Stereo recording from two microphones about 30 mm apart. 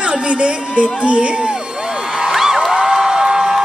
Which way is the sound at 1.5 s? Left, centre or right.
Centre.